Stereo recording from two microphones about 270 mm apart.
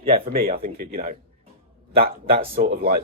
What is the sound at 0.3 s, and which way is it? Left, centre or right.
A man's voice, right.